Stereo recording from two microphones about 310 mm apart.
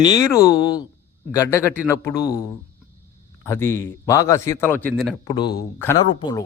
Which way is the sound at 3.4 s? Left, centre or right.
Centre.